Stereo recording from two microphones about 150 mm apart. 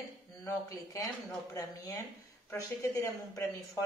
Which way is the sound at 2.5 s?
20° left (ahead or behind).